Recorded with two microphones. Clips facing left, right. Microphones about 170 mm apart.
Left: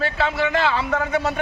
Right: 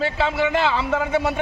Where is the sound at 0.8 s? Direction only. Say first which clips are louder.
Right 1 dB; 10° right (ahead or behind).